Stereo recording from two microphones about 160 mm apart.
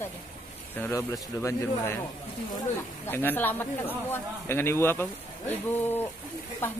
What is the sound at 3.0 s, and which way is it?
Speech, 15° left (ahead or behind).